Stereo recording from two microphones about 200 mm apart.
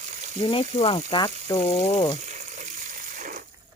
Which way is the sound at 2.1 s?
35° right (ahead or behind).